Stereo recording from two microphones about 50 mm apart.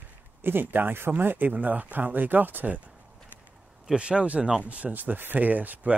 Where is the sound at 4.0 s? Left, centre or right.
Right.